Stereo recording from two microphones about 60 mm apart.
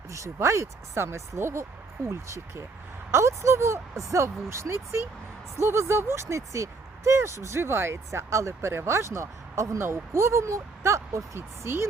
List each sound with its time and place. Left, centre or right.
0.1 s speech: right
2.0 s speech: right
11.3 s speech: right